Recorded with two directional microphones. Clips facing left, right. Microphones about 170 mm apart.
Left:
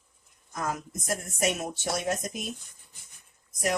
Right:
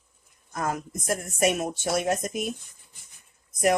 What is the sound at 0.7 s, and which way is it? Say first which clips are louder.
Speech: right 3 dB; 55° right (ahead or behind).